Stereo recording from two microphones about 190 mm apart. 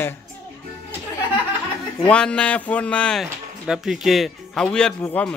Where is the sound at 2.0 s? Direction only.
5° left (ahead or behind).